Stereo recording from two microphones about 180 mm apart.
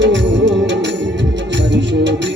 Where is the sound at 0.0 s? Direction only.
85° right.